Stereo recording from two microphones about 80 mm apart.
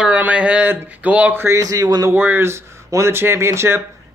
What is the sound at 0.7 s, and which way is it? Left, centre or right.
Speech, centre.